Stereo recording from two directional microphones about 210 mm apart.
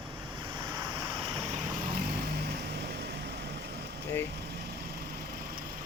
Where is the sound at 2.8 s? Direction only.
50° right (ahead or behind).